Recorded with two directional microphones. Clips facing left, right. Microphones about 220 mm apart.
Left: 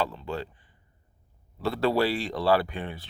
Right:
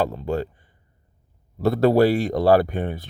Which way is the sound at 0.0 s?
45° right (ahead or behind).